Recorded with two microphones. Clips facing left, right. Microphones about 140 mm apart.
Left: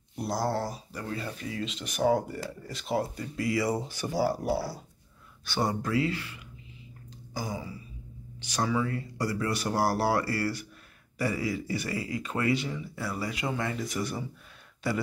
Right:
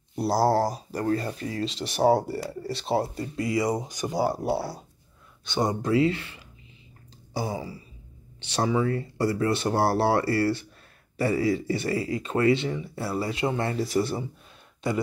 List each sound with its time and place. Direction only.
0.1 s speech: 35° right (ahead or behind)